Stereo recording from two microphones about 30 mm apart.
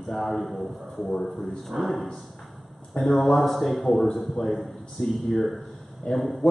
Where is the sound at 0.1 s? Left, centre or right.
Centre.